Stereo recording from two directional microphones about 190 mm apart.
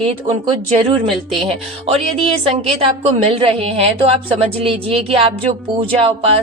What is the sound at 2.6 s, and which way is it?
A woman's voice, 30° right (ahead or behind).